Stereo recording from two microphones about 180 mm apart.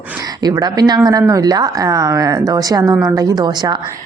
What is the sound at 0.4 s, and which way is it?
A woman's voice, 20° right (ahead or behind).